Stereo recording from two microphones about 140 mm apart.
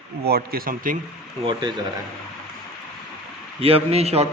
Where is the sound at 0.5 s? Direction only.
90° right.